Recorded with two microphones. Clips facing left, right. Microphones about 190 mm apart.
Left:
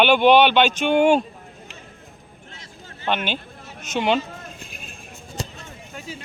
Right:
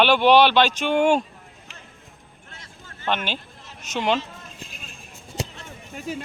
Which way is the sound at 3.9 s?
35° right (ahead or behind).